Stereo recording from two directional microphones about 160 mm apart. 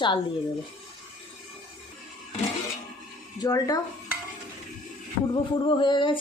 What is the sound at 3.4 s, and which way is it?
Speech, 20° left (ahead or behind).